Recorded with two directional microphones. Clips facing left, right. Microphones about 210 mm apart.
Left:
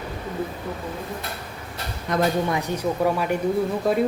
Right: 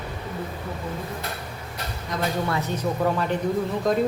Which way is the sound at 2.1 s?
60° left (ahead or behind).